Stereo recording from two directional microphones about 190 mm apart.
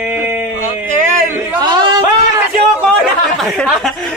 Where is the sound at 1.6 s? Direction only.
20° right (ahead or behind).